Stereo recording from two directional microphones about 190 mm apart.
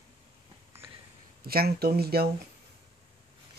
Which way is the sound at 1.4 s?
55° right (ahead or behind).